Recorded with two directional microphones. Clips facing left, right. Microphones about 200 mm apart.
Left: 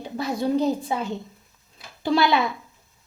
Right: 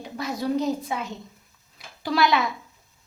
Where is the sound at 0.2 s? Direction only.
30° left (ahead or behind).